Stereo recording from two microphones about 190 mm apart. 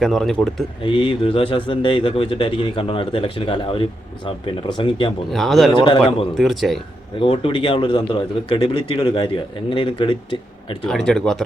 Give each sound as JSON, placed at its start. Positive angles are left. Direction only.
{"t": 0.0, "sound": "speech", "side_deg": 0}
{"t": 0.9, "sound": "speech", "side_deg": 25}
{"t": 5.3, "sound": "speech", "side_deg": 0}
{"t": 5.7, "sound": "speech", "side_deg": 25}
{"t": 6.3, "sound": "speech", "side_deg": 0}
{"t": 7.2, "sound": "speech", "side_deg": 25}
{"t": 10.8, "sound": "speech", "side_deg": 5}